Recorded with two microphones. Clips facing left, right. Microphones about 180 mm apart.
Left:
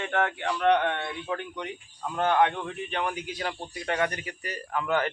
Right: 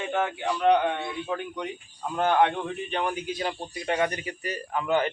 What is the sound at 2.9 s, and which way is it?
A man's voice, 25° right (ahead or behind).